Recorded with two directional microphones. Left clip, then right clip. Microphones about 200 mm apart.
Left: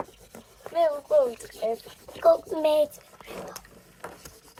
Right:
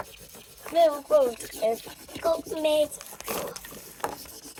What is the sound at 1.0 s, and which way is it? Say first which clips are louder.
Speech: even; 40° right (ahead or behind).